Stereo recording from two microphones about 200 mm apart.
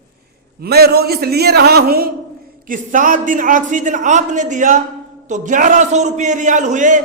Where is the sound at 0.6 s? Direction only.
50° right (ahead or behind).